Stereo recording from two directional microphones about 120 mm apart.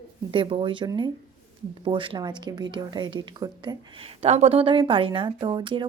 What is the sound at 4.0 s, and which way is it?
A woman's voice, 60° right (ahead or behind).